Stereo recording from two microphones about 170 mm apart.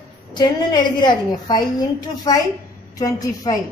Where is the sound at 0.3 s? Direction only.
25° left (ahead or behind).